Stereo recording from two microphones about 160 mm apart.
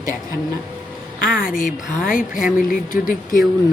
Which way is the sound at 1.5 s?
60° left (ahead or behind).